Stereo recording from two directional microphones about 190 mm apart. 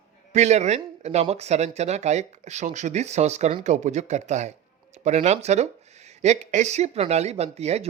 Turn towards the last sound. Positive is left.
turn(degrees=-35)  # may be behind; listen again after turning